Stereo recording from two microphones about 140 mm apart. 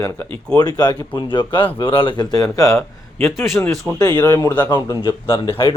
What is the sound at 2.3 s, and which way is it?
Speech, 25° left (ahead or behind).